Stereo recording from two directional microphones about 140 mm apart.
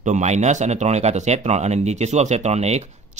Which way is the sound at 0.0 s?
55° right (ahead or behind).